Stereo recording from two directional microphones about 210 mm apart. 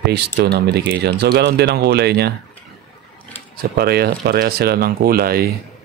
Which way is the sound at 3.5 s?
50° right (ahead or behind).